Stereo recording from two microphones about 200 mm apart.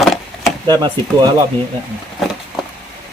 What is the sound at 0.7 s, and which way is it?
Speech, 20° right (ahead or behind).